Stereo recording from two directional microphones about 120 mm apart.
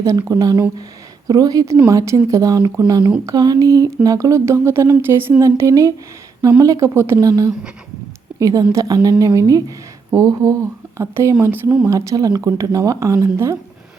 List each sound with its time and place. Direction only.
0.2 s a woman's voice: 30° right (ahead or behind)